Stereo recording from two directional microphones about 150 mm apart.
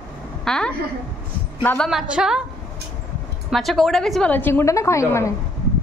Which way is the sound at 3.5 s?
Centre (ahead or behind).